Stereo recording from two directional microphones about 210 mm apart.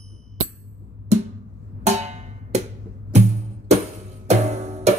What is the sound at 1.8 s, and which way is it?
Music, 30° right (ahead or behind).